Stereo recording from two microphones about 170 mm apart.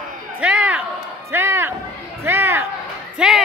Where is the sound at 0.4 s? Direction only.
5° right (ahead or behind).